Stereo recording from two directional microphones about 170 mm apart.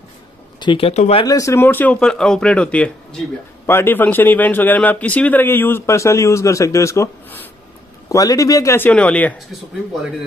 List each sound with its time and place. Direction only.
0.6 s speech: 30° left (ahead or behind)
1.2 s a man's voice: 20° left (ahead or behind)